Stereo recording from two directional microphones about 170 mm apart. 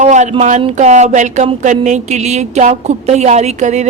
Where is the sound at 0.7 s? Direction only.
40° right (ahead or behind).